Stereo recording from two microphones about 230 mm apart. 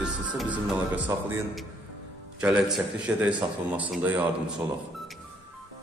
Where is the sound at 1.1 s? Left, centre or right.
Centre.